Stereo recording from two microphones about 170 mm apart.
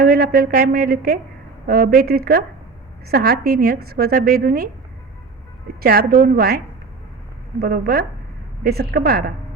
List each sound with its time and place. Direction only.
0.0 s a woman's voice: 60° right (ahead or behind)
5.8 s a woman's voice: 65° right (ahead or behind)
7.6 s a woman's voice: 65° right (ahead or behind)